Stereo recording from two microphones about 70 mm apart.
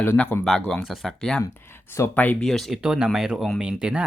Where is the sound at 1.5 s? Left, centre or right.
Left.